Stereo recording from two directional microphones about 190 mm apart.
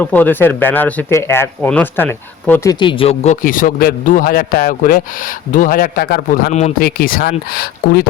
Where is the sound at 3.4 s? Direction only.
45° left (ahead or behind).